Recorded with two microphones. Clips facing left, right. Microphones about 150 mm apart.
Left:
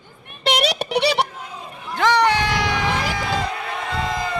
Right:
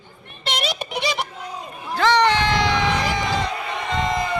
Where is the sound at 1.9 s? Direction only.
10° left (ahead or behind).